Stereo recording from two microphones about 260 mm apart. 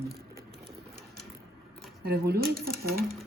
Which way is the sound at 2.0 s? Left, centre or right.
Right.